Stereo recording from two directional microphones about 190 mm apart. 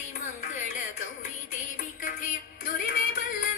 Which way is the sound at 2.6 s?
45° left (ahead or behind).